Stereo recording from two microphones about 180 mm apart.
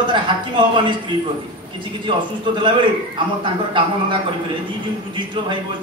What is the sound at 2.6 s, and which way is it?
A man's voice, 25° right (ahead or behind).